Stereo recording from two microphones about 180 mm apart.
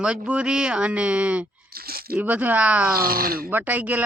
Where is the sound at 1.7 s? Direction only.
55° right (ahead or behind).